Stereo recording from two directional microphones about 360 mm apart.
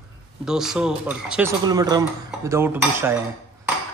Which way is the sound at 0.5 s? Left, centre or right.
Centre.